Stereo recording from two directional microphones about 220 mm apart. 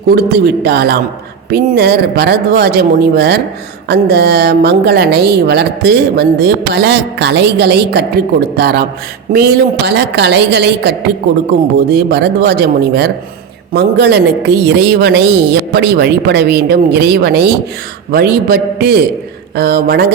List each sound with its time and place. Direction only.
0.1 s a woman's voice: 45° right (ahead or behind)